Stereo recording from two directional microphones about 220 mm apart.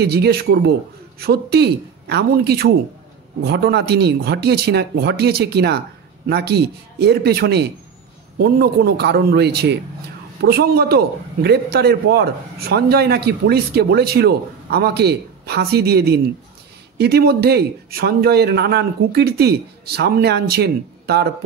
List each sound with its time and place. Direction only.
0.0 s a man's voice: 45° right (ahead or behind)